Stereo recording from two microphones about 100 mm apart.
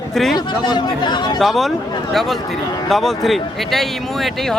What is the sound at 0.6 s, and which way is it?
Speech, 50° left (ahead or behind).